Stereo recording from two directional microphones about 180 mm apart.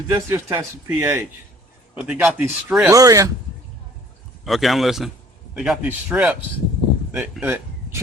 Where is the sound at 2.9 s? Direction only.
20° right (ahead or behind).